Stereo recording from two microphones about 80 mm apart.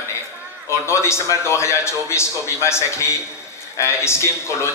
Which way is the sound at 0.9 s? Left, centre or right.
Left.